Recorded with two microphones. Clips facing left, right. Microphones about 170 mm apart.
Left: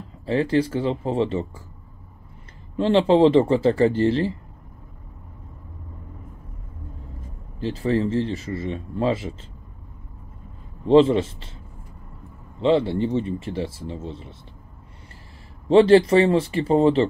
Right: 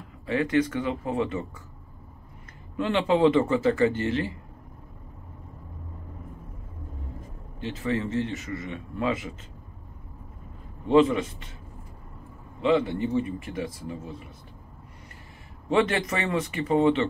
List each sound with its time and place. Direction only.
0.3 s a man's voice: 30° left (ahead or behind)
2.8 s a man's voice: 30° left (ahead or behind)
7.6 s a man's voice: 35° left (ahead or behind)
10.9 s speech: 30° left (ahead or behind)
12.6 s speech: 30° left (ahead or behind)
15.7 s a man's voice: 30° left (ahead or behind)